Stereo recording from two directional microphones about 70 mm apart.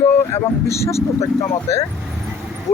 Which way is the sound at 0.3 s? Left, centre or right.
Left.